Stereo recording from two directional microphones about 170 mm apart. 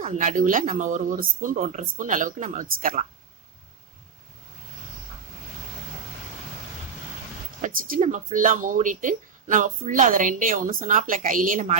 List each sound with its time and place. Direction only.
0.0 s speech: 50° right (ahead or behind)
7.6 s speech: 55° right (ahead or behind)